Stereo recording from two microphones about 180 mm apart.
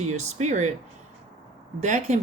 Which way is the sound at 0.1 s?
40° right (ahead or behind).